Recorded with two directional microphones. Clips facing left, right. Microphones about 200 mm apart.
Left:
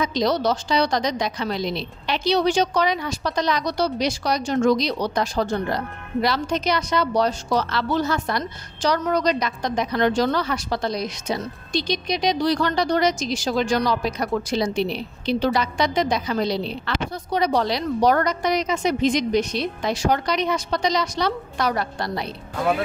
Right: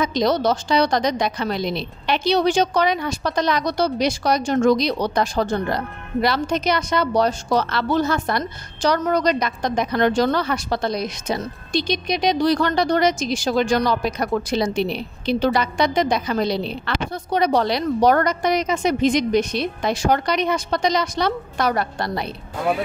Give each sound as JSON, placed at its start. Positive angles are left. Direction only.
{"t": 0.0, "sound": "a woman's voice", "side_deg": -55}